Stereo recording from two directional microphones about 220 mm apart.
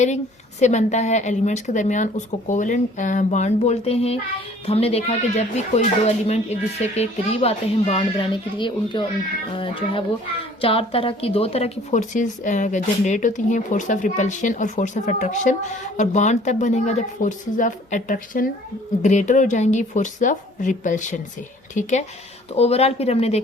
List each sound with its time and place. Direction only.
0.6 s a woman's voice: 30° left (ahead or behind)
10.6 s a woman's voice: 25° left (ahead or behind)